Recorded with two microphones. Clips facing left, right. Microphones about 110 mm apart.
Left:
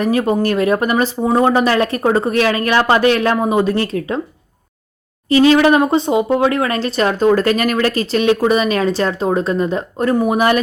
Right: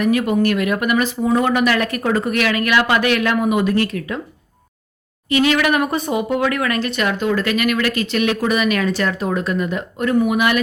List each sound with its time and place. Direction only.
0.0 s speech: 30° left (ahead or behind)
5.3 s speech: 30° left (ahead or behind)